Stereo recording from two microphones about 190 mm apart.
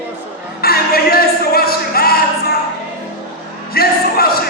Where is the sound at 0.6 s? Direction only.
55° left (ahead or behind).